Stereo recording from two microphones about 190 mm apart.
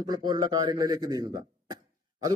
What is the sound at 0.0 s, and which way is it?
A man's voice, 20° right (ahead or behind).